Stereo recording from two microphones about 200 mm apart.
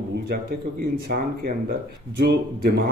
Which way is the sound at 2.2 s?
55° right (ahead or behind).